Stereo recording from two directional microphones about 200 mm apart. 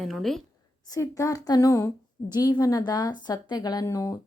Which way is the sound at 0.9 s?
15° left (ahead or behind).